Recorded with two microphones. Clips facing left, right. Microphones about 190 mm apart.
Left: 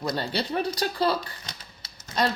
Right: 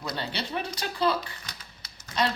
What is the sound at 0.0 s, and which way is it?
Speech, 40° left (ahead or behind).